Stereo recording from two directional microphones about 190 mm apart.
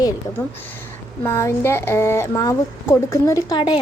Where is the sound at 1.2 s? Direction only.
15° left (ahead or behind).